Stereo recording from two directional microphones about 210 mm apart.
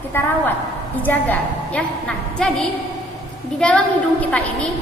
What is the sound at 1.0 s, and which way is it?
A woman's voice, 10° left (ahead or behind).